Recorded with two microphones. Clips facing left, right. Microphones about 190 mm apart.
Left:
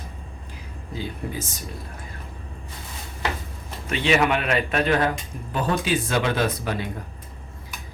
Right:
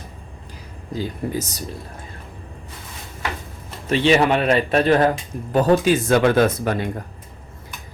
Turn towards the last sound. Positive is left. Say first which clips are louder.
# right 7 dB
turn(degrees=-50)  # may be behind; listen again after turning